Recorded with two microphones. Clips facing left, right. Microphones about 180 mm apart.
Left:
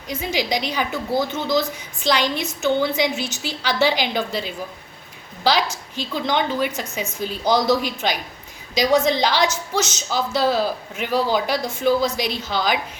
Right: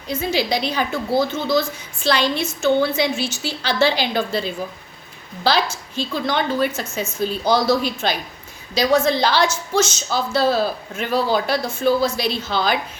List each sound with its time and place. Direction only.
0.1 s a woman's voice: 15° left (ahead or behind)